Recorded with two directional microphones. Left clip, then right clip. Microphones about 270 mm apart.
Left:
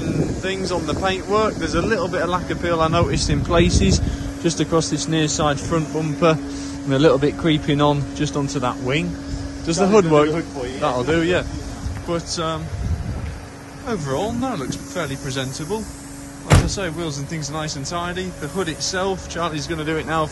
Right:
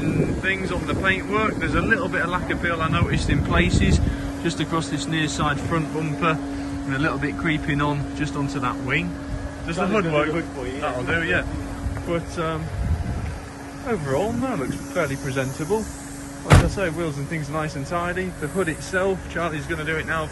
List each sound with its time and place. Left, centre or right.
0.4 s speech: centre
14.0 s speech: centre
16.4 s music: centre
16.7 s speech: centre